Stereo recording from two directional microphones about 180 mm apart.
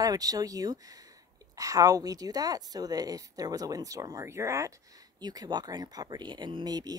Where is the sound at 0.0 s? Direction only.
20° right (ahead or behind).